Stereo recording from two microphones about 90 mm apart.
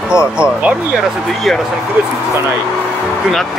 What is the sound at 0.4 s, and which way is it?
Speech, 15° right (ahead or behind).